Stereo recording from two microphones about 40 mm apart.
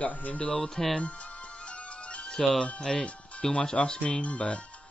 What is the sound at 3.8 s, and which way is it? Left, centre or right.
Speech, left.